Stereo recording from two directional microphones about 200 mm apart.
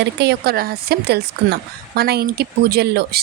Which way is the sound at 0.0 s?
55° right (ahead or behind).